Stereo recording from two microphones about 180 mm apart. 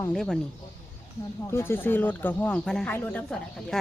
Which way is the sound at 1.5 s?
15° left (ahead or behind).